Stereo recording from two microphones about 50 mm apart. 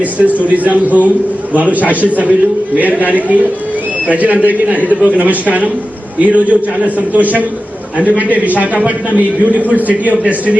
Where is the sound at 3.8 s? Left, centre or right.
Right.